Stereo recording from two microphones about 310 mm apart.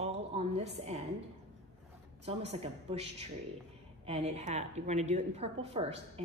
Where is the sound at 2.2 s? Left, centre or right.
Centre.